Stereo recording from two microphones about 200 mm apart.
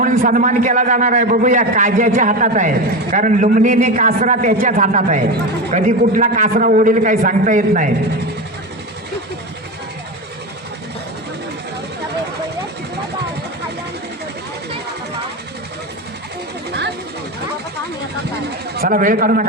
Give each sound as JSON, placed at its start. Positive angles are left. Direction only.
{"t": 0.0, "sound": "a man's voice", "side_deg": -45}
{"t": 18.8, "sound": "a man's voice", "side_deg": -45}